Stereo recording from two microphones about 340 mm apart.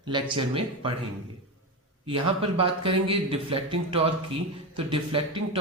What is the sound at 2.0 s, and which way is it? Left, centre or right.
Speech, centre.